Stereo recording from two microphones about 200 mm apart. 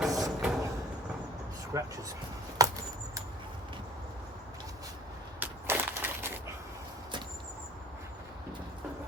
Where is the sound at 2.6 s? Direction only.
20° right (ahead or behind).